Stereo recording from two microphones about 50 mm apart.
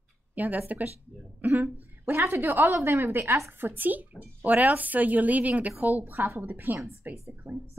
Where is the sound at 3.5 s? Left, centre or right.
Right.